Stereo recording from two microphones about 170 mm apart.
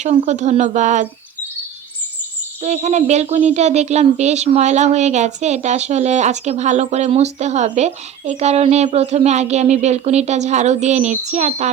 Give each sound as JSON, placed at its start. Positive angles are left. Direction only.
{"t": 0.0, "sound": "speech", "side_deg": -45}
{"t": 2.6, "sound": "speech", "side_deg": -40}